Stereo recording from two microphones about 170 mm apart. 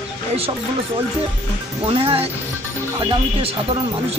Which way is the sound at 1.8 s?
35° right (ahead or behind).